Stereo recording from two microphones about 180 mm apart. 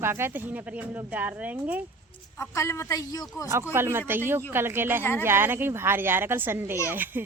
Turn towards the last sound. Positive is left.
turn(degrees=-10)  # may be behind; listen again after turning